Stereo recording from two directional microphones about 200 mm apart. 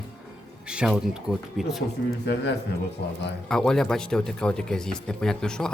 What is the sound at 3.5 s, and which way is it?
Speech, 5° left (ahead or behind).